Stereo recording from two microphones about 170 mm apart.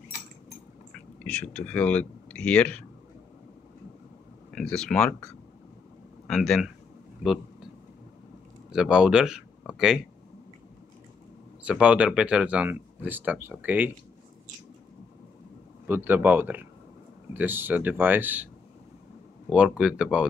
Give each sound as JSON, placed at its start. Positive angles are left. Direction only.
{"t": 1.2, "sound": "speech", "side_deg": 10}
{"t": 4.5, "sound": "speech", "side_deg": 5}
{"t": 8.7, "sound": "speech", "side_deg": -5}
{"t": 11.6, "sound": "speech", "side_deg": -5}
{"t": 15.9, "sound": "speech", "side_deg": -10}
{"t": 19.5, "sound": "speech", "side_deg": -5}